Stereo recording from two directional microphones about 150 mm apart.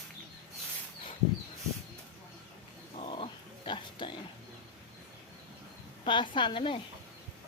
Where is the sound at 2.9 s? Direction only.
40° left (ahead or behind).